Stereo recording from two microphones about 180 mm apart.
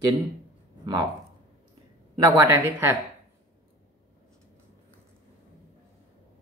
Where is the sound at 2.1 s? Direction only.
20° right (ahead or behind).